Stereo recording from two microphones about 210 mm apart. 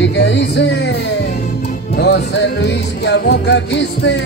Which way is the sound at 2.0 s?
50° left (ahead or behind).